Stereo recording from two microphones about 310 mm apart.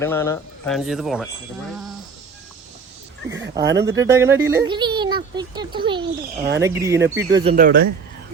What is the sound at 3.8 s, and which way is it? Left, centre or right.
A child's voice, centre.